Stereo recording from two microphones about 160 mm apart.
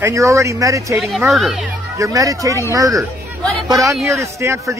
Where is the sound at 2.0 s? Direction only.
20° right (ahead or behind).